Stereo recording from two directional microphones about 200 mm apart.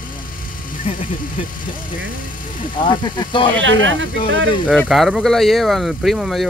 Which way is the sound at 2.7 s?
25° left (ahead or behind).